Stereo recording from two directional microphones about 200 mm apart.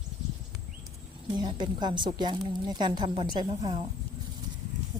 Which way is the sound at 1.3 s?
20° right (ahead or behind).